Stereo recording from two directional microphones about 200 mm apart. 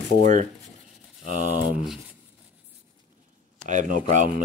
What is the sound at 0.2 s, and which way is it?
Speech, 40° right (ahead or behind).